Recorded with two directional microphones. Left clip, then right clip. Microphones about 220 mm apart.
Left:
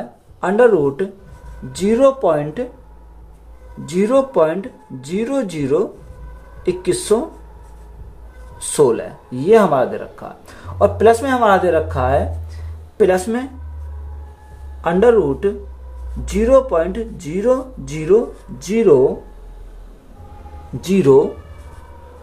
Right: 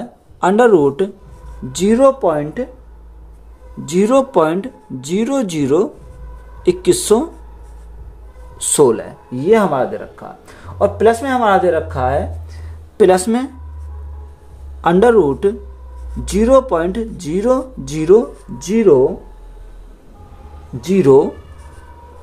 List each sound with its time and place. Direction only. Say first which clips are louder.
0.4 s speech: right 2 dB; 45° right (ahead or behind); by 2.7 s 25° right (ahead or behind)
3.8 s speech: right 2 dB; 40° right (ahead or behind)
8.7 s speech: right 2 dB; 30° right (ahead or behind); by 12.2 s 10° right (ahead or behind)
12.9 s speech: right 3 dB; 40° right (ahead or behind)
14.8 s speech: right 2 dB; 45° right (ahead or behind); by 18.9 s 30° right (ahead or behind)
20.8 s speech: right 2 dB; 15° right (ahead or behind)